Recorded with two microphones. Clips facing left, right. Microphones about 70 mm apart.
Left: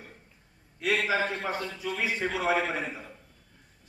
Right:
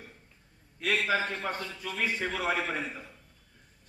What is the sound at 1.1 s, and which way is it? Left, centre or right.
A man's voice, centre.